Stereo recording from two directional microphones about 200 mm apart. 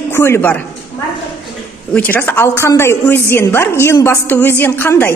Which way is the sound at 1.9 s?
10° left (ahead or behind).